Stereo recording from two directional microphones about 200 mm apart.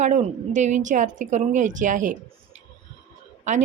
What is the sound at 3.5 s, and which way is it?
Speech, 40° right (ahead or behind).